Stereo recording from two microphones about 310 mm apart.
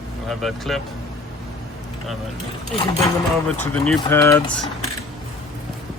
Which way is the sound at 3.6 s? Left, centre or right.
Centre.